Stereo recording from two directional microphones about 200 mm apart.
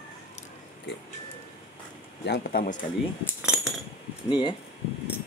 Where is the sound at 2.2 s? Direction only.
55° left (ahead or behind).